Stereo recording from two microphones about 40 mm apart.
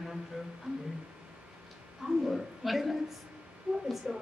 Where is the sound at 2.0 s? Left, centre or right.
Centre.